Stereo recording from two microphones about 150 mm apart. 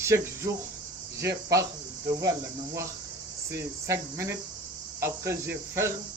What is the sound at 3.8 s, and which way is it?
Speech, 20° right (ahead or behind).